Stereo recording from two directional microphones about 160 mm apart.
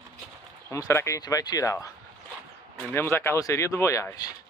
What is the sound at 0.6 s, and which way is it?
Speech, 15° left (ahead or behind).